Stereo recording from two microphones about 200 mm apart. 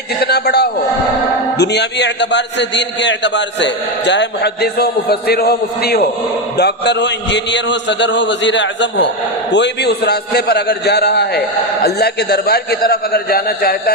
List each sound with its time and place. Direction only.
0.2 s a man's voice: 55° left (ahead or behind)